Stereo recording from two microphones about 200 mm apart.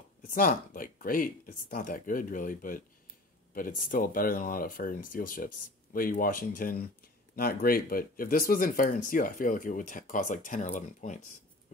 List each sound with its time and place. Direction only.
0.3 s speech: 45° left (ahead or behind)